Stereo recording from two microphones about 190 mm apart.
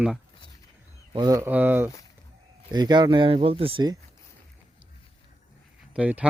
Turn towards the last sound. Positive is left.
turn(degrees=-5)  # may be behind; listen again after turning